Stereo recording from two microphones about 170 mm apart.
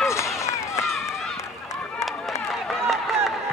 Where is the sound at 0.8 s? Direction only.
Centre (ahead or behind).